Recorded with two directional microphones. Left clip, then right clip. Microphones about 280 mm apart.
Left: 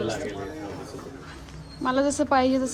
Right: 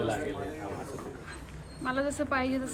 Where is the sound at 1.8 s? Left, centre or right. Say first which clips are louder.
Left 7 dB; centre.